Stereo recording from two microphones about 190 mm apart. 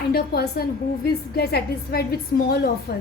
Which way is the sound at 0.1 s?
55° left (ahead or behind).